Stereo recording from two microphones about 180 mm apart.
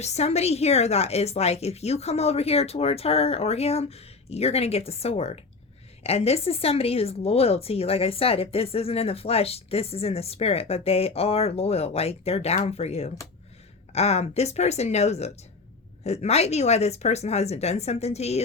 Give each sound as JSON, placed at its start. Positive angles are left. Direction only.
{"t": 0.0, "sound": "speech", "side_deg": 35}